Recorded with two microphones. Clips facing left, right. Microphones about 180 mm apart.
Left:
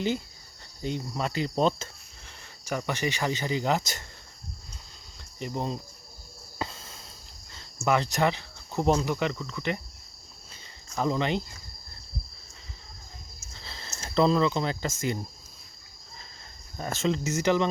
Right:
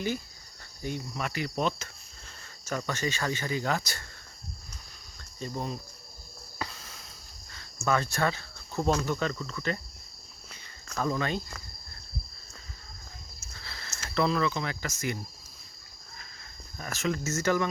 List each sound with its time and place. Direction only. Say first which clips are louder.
0.8 s cricket: left 3 dB; 20° left (ahead or behind)
1.1 s speech: left 5 dB; 25° left (ahead or behind)
2.6 s speech: left 2 dB; 15° left (ahead or behind)
5.4 s speech: left 3 dB; 20° left (ahead or behind)
6.6 s a sound: left 3 dB; 25° left (ahead or behind)
7.5 s cricket: left 3 dB; 20° left (ahead or behind)
10.9 s speech: left 3 dB; 20° left (ahead or behind)
13.6 s speech: left 2 dB; 25° left (ahead or behind)
16.7 s cricket: left 4 dB; 25° left (ahead or behind)
17.2 s cricket: left 2 dB; 15° left (ahead or behind)